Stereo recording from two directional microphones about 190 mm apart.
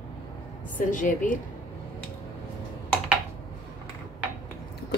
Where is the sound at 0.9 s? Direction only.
45° left (ahead or behind).